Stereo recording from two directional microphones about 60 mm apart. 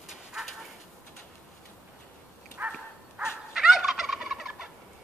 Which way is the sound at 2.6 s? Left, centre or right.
Right.